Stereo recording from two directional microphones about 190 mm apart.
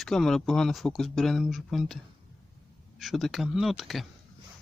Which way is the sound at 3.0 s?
Centre (ahead or behind).